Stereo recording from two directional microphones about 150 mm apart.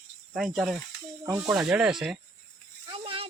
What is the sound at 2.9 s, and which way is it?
Rattle, 35° right (ahead or behind).